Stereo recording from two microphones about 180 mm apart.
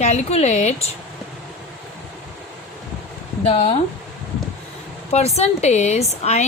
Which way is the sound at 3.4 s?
35° left (ahead or behind).